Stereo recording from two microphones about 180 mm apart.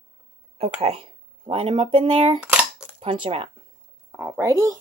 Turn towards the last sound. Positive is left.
turn(degrees=-20)  # may be behind; listen again after turning